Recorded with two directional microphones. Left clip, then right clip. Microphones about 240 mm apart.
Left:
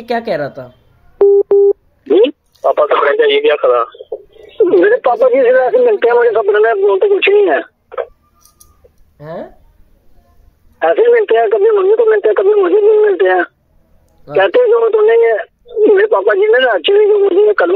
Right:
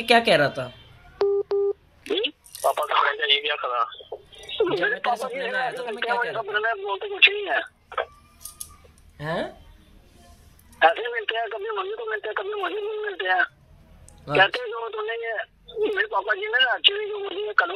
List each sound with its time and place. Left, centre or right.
0.0 s speech: centre
0.7 s busy signal: centre
2.0 s speech: centre
4.0 s a sound: right
4.4 s speech: centre
9.2 s speech: centre
10.8 s speech: centre